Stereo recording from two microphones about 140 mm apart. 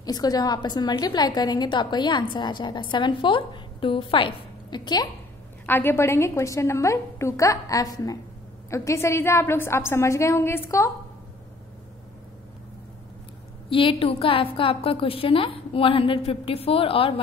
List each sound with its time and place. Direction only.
0.0 s a woman's voice: 30° left (ahead or behind)
5.7 s a woman's voice: 15° left (ahead or behind)
13.7 s a woman's voice: 40° left (ahead or behind)